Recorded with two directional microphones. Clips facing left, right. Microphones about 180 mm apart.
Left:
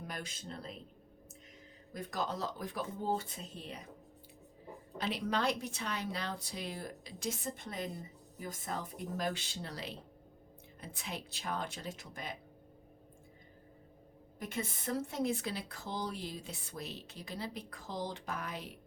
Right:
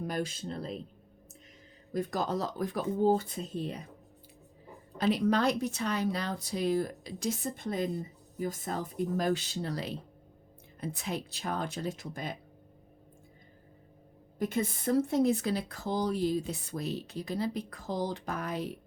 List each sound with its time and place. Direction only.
0.1 s speech: 35° right (ahead or behind)
1.9 s speech: 35° right (ahead or behind)
4.9 s speech: 40° right (ahead or behind)
14.3 s speech: 35° right (ahead or behind)